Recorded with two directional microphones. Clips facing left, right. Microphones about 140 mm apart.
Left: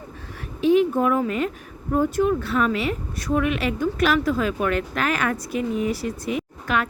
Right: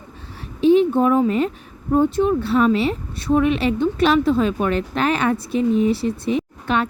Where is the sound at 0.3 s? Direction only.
30° right (ahead or behind).